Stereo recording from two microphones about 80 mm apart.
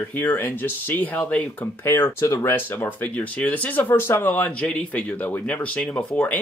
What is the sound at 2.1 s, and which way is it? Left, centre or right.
Speech, left.